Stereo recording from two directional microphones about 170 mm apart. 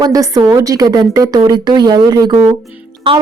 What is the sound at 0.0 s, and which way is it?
A woman's voice, 20° right (ahead or behind).